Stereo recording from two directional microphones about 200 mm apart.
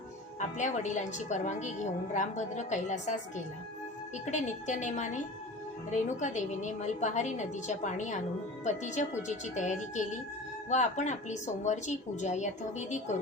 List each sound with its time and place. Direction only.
0.3 s a woman's voice: 35° left (ahead or behind)